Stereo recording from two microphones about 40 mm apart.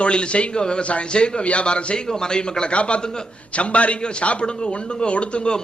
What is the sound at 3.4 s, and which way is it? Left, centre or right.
A man's voice, left.